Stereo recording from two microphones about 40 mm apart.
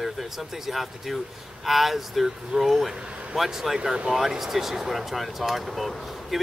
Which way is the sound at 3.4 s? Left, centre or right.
Centre.